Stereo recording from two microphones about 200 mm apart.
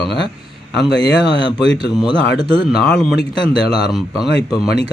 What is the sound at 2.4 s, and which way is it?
Speech, 20° left (ahead or behind).